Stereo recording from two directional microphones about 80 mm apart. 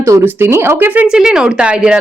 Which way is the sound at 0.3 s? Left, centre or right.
Right.